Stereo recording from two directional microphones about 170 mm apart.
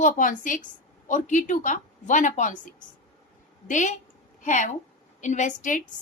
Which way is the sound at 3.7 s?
45° left (ahead or behind).